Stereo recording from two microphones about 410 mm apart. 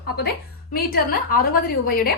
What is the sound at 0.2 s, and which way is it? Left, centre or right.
A woman's voice, left.